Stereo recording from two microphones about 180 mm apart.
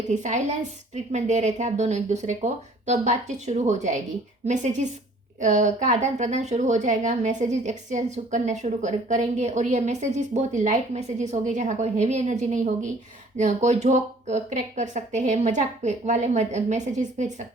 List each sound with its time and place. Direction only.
0.1 s a woman's voice: 40° right (ahead or behind)